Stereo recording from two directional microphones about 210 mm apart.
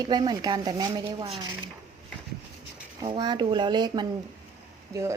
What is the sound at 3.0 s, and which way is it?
A woman's voice, 20° right (ahead or behind).